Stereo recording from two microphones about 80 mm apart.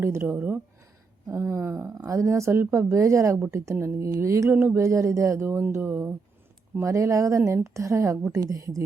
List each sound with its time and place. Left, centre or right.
0.0 s speech: right
1.3 s speech: right
6.7 s speech: right